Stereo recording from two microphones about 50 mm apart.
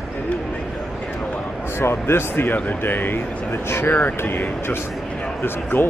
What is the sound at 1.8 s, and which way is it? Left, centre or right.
Speech, left.